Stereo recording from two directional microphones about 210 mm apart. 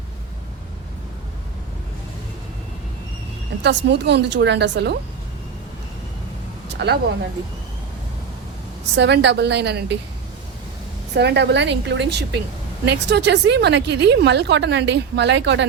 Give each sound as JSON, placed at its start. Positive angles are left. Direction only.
{"t": 3.6, "sound": "speech", "side_deg": -55}
{"t": 6.7, "sound": "speech", "side_deg": -55}
{"t": 9.0, "sound": "a woman's voice", "side_deg": -55}
{"t": 11.1, "sound": "speech", "side_deg": -55}